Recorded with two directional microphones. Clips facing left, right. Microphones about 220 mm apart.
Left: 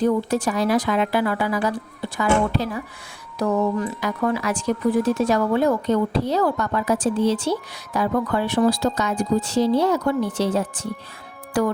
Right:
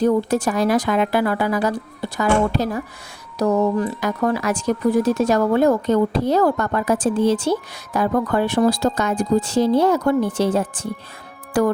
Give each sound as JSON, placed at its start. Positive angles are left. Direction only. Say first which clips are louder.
{"t": 0.0, "sound": "speech", "louder": "right 2 dB", "side_deg": -45}